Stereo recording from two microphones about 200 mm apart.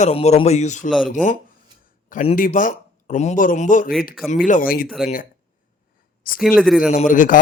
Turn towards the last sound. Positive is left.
turn(degrees=40)  # may be behind; listen again after turning